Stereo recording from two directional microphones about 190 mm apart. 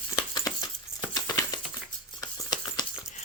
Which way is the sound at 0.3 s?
20° left (ahead or behind).